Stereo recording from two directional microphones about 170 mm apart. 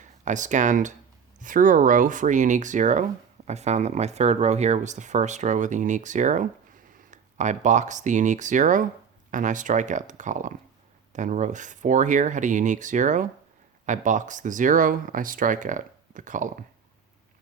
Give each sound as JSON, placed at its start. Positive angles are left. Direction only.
{"t": 0.0, "sound": "speech", "side_deg": -45}